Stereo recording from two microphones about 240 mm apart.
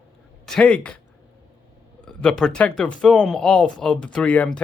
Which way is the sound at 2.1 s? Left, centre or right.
Centre.